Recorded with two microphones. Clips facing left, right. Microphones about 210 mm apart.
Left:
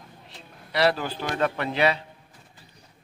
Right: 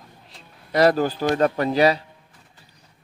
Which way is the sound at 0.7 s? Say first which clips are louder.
Right 6 dB; 45° right (ahead or behind).